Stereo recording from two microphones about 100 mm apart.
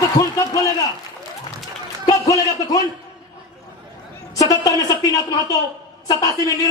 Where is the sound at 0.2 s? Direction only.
35° left (ahead or behind).